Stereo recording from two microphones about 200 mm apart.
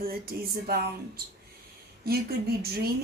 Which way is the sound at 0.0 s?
50° right (ahead or behind).